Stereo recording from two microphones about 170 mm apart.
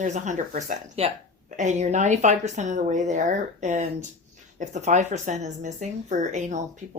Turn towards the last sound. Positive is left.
turn(degrees=-45)  # may be behind; listen again after turning